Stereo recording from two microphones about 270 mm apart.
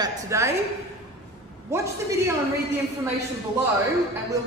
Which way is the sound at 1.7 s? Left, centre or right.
Centre.